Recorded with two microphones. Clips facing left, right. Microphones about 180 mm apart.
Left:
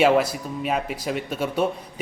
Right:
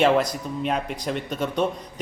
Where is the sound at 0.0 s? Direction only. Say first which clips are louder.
Left 1 dB; 5° left (ahead or behind).